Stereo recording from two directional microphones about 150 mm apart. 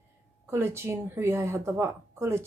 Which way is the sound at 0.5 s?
15° right (ahead or behind).